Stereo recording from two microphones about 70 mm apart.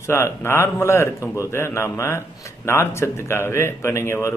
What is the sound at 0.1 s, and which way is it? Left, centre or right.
Speech, left.